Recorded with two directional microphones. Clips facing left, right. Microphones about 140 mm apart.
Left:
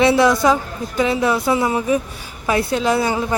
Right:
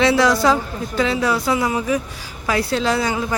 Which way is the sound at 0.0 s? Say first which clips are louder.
Left 2 dB; 25° left (ahead or behind).